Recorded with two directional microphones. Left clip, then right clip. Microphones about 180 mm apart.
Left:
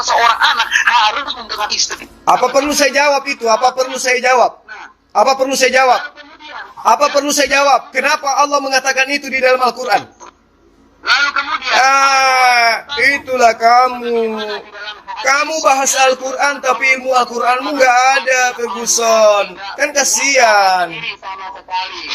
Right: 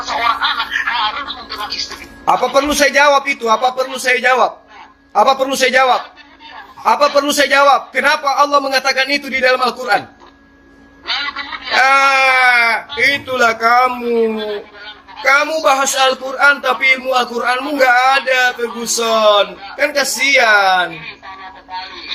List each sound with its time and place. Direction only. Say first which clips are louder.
0.0 s a man's voice: left 5 dB; 35° left (ahead or behind)
11.0 s a sound: left 7 dB; 40° left (ahead or behind)
11.8 s speech: even; 25° left (ahead or behind)
14.3 s a man's voice: right 1 dB; 35° left (ahead or behind)
20.9 s speech: left 6 dB; 40° left (ahead or behind)